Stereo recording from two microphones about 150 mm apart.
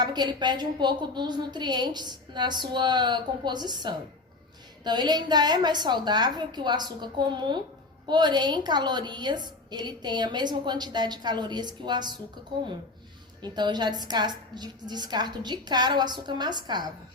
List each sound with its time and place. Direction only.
0.0 s a woman's voice: 30° right (ahead or behind)
13.4 s a woman's voice: 30° right (ahead or behind)